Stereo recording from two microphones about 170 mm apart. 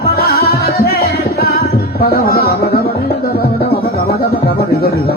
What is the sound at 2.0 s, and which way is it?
Speech, 60° left (ahead or behind).